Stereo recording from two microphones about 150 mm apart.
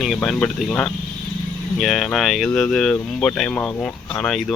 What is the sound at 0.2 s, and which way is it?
Speech, 5° left (ahead or behind).